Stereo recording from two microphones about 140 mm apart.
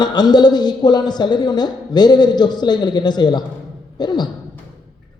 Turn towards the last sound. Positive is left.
turn(degrees=30)  # may be behind; listen again after turning